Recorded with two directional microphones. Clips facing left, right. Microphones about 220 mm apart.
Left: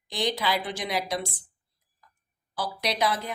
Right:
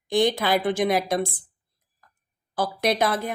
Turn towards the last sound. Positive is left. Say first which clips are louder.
# right 5 dB
turn(degrees=-50)  # may be behind; listen again after turning